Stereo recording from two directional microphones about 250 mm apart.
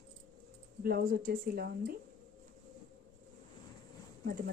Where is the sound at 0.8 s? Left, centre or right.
Right.